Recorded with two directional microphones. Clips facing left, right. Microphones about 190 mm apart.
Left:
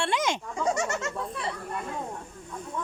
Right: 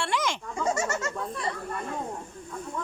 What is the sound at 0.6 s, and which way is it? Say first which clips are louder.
Speech: even; centre (ahead or behind).